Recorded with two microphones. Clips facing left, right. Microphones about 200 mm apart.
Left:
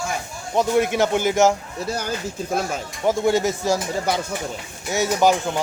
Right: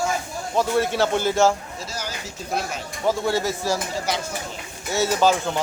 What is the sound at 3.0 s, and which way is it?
Speech, 20° left (ahead or behind).